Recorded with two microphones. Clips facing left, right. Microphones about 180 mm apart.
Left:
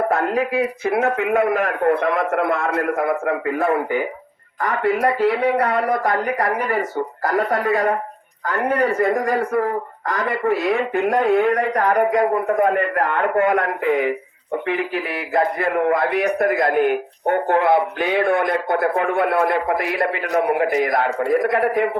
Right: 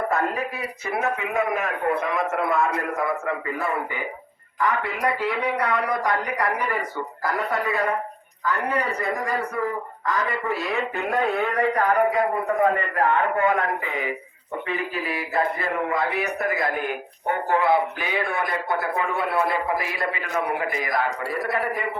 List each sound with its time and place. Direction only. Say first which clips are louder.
0.1 s a man's voice: left 6 dB; 60° left (ahead or behind)